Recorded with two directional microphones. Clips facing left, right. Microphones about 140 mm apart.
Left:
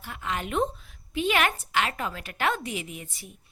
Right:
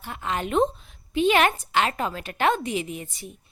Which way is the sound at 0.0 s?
30° right (ahead or behind).